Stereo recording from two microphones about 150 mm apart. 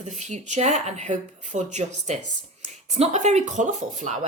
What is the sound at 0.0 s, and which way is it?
Speech, 50° right (ahead or behind).